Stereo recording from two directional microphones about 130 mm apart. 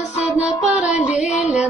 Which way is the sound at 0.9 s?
65° left (ahead or behind).